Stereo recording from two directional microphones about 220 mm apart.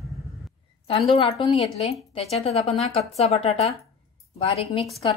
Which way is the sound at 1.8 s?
25° left (ahead or behind).